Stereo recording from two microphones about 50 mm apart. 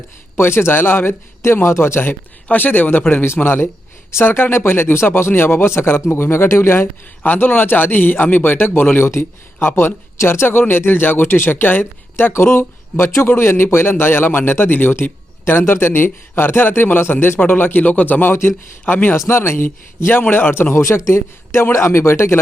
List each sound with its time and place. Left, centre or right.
0.3 s a man's voice: left
7.3 s speech: left
9.0 s a man's voice: left
12.3 s a man's voice: left
14.0 s a man's voice: left
19.1 s a man's voice: left
20.8 s a man's voice: left
21.1 s speech: left